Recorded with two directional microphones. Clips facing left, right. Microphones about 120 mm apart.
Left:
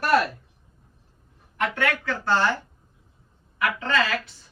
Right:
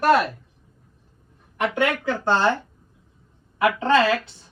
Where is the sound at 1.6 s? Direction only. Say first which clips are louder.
Right 3 dB; 20° right (ahead or behind).